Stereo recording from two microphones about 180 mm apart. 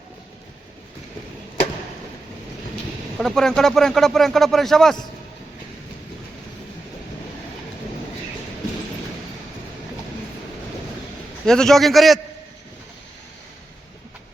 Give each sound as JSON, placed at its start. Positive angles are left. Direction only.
{"t": 3.2, "sound": "speech", "side_deg": 0}
{"t": 11.4, "sound": "speech", "side_deg": 5}